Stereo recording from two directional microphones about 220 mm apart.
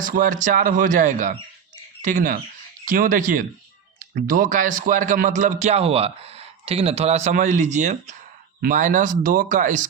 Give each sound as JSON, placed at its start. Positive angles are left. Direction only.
{"t": 0.0, "sound": "speech", "side_deg": -40}